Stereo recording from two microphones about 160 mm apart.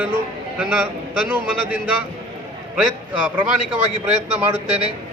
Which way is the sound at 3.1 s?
10° right (ahead or behind).